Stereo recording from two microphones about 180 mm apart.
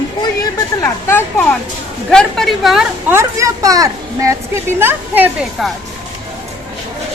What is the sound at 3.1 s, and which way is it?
Speech, 15° right (ahead or behind).